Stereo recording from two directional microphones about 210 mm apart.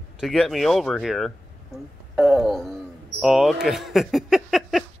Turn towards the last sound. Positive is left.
turn(degrees=0)  # may be behind; listen again after turning